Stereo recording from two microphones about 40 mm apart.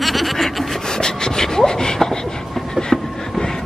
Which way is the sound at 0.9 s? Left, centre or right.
Centre.